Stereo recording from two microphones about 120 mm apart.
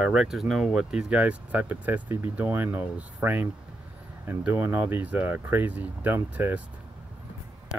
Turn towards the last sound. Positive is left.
turn(degrees=-15)  # may be behind; listen again after turning